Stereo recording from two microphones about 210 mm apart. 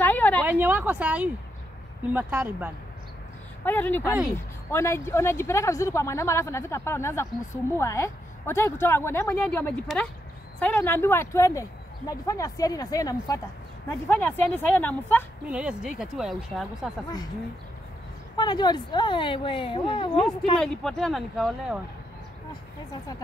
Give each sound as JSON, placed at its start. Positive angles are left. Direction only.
{"t": 0.0, "sound": "a sound", "side_deg": 10}
{"t": 0.5, "sound": "speech", "side_deg": -10}
{"t": 3.6, "sound": "speech", "side_deg": 10}
{"t": 15.4, "sound": "speech", "side_deg": -5}
{"t": 18.3, "sound": "speech", "side_deg": 20}
{"t": 20.5, "sound": "speech", "side_deg": 0}